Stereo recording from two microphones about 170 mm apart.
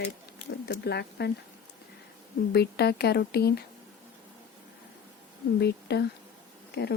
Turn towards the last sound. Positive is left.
turn(degrees=80)